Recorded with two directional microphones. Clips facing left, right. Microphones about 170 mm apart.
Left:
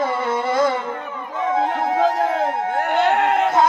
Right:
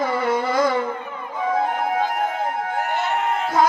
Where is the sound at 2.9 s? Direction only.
65° left (ahead or behind).